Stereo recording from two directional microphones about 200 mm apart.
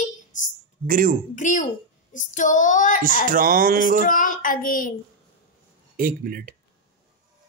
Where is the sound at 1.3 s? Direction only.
40° left (ahead or behind).